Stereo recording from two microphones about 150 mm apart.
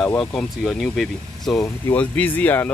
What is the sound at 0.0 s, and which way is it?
Speech, 5° left (ahead or behind).